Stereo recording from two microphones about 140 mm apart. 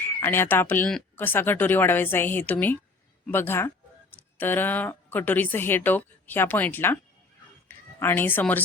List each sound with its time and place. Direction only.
0.2 s a woman's voice: 15° left (ahead or behind)